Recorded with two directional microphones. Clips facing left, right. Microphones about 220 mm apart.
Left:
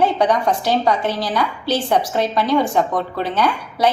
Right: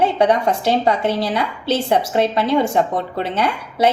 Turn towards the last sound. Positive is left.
turn(degrees=-25)  # may be behind; listen again after turning